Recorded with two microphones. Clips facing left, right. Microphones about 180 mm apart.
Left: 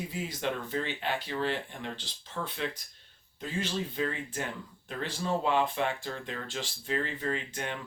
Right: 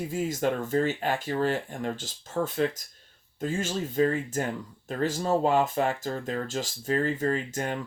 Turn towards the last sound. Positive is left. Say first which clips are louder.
# right 6 dB
turn(degrees=-40)  # may be behind; listen again after turning